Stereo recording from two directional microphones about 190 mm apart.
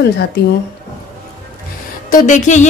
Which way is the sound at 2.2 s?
40° left (ahead or behind).